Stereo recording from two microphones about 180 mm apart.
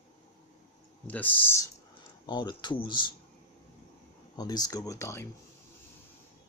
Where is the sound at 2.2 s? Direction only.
25° left (ahead or behind).